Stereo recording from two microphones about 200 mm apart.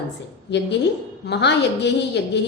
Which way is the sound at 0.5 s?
60° left (ahead or behind).